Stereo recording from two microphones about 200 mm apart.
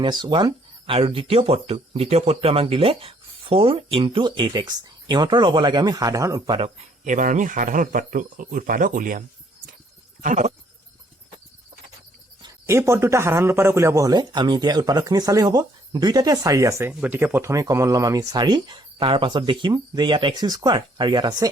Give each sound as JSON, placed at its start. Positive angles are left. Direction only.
{"t": 0.0, "sound": "speech", "side_deg": -20}
{"t": 6.6, "sound": "speech", "side_deg": -40}
{"t": 12.4, "sound": "speech", "side_deg": -15}